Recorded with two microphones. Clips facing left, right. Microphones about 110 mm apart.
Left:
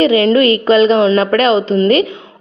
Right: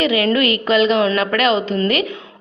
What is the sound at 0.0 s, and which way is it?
A woman's voice, 35° left (ahead or behind).